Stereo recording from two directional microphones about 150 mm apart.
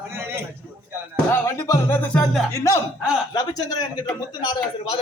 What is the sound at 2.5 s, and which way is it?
A man's voice, 20° left (ahead or behind).